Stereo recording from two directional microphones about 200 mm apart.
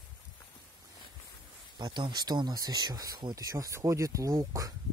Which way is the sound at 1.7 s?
20° right (ahead or behind).